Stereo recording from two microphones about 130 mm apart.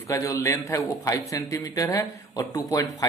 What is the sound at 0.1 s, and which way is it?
A man's voice, 25° left (ahead or behind).